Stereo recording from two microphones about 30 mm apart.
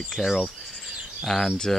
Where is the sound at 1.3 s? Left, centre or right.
Centre.